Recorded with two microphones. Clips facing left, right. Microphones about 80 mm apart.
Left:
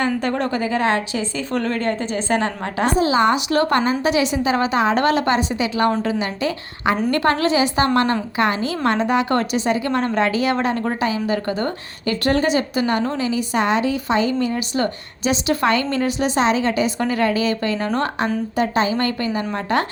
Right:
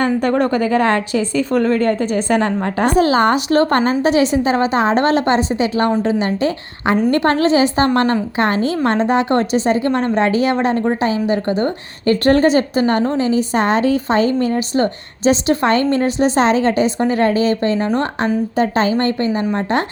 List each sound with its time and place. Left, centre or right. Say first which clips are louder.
0.0 s a woman's voice: right 5 dB; right
12.0 s a woman's voice: right 6 dB; right
18.5 s a woman's voice: right 2 dB; right